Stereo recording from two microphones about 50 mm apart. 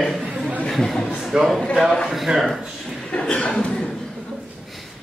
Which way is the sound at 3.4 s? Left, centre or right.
Centre.